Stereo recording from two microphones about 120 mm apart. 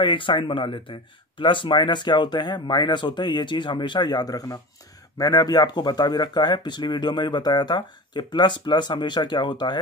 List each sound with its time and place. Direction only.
0.0 s speech: 45° left (ahead or behind)